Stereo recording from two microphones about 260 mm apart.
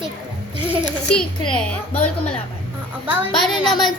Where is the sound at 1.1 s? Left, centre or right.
Centre.